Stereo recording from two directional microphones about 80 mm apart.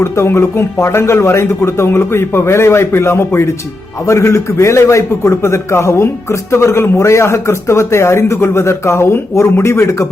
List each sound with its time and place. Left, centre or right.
0.0 s a man's voice: left